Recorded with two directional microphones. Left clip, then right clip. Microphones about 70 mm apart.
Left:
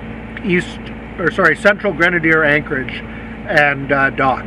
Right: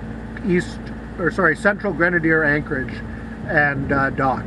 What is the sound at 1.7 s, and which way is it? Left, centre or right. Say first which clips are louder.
Speech: left 5 dB; left.